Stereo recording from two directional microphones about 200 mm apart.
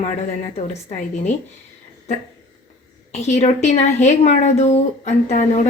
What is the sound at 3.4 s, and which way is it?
Speech, 35° left (ahead or behind).